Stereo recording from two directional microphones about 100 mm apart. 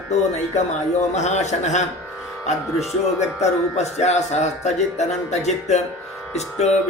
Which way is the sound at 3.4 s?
90° left.